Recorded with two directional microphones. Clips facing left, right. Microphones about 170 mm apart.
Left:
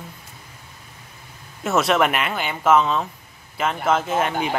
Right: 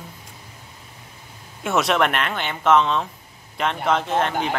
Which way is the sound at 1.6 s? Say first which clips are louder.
Left 1 dB; centre (ahead or behind).